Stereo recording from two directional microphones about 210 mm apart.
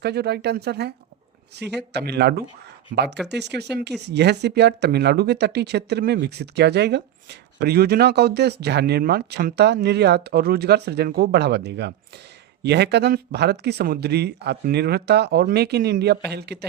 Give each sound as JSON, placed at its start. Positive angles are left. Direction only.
{"t": 0.0, "sound": "speech", "side_deg": -50}